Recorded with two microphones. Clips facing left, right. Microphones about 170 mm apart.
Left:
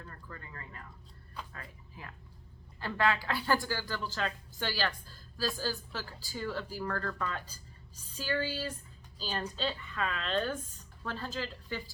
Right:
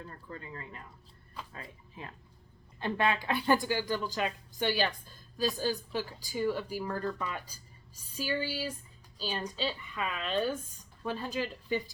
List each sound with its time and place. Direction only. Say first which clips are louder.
0.0 s a woman's voice: right 4 dB; 25° right (ahead or behind)